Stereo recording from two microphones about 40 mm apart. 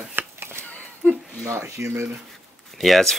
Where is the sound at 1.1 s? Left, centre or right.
Right.